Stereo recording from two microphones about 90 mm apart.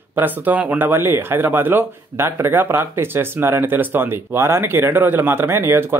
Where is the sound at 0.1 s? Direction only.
20° right (ahead or behind).